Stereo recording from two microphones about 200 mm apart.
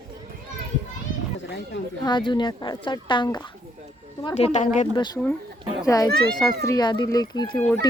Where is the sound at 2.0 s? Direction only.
25° left (ahead or behind).